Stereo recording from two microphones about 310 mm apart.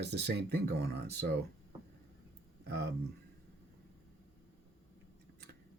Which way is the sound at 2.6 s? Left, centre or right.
Right.